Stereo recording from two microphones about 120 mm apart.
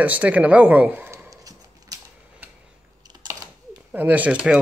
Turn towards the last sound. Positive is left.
turn(degrees=-10)  # may be behind; listen again after turning